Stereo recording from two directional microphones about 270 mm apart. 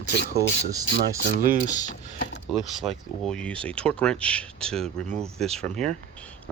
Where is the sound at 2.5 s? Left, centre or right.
Centre.